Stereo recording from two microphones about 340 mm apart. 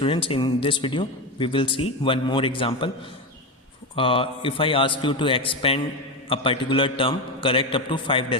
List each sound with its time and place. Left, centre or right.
0.0 s speech: centre
3.9 s speech: centre